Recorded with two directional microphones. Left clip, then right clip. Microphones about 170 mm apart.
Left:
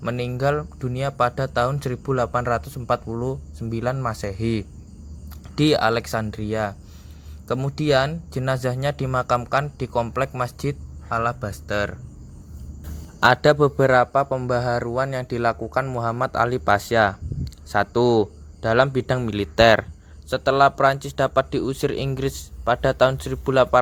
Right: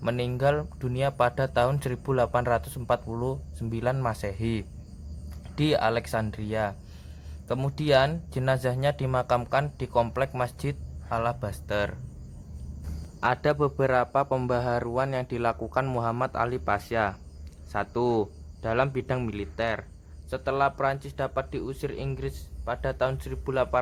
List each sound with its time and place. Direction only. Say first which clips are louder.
0.0 s speech: left 2 dB; 5° left (ahead or behind)
13.1 s a man's voice: left 9 dB; 30° left (ahead or behind)
19.3 s speech: left 14 dB; 40° left (ahead or behind)
20.3 s speech: left 9 dB; 30° left (ahead or behind)